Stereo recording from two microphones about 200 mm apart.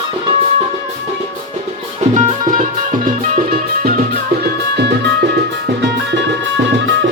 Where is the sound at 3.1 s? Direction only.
40° right (ahead or behind).